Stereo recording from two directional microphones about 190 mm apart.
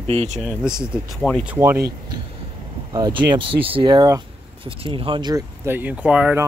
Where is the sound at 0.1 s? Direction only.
30° right (ahead or behind).